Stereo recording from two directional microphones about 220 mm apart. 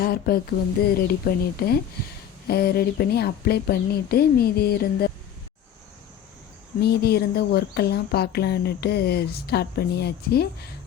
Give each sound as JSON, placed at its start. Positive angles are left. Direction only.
{"t": 0.0, "sound": "a sound", "side_deg": 45}
{"t": 0.9, "sound": "speech", "side_deg": 45}
{"t": 6.8, "sound": "speech", "side_deg": 45}